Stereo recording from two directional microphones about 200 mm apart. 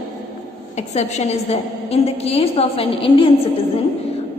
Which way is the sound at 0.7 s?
35° left (ahead or behind).